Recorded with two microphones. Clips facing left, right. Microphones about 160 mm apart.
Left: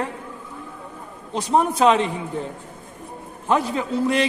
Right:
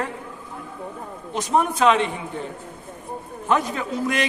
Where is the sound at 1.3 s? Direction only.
30° left (ahead or behind).